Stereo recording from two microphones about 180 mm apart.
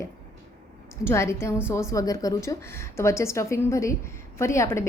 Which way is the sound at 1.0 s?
15° left (ahead or behind).